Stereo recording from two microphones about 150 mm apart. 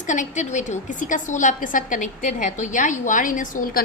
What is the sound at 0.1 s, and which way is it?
A woman's voice, 55° left (ahead or behind).